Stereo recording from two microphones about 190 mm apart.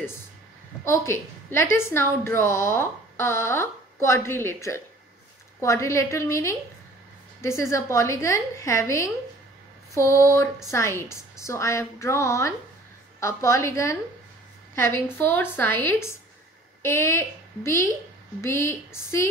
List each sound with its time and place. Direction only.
0.8 s a woman's voice: 15° left (ahead or behind)